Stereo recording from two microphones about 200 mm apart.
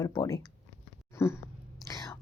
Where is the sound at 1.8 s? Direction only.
15° left (ahead or behind).